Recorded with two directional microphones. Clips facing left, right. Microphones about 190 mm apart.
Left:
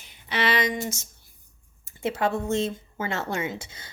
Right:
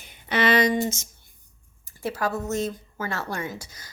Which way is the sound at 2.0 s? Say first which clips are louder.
Left 2 dB; 25° left (ahead or behind).